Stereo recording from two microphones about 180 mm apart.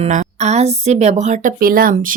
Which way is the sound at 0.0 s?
40° right (ahead or behind).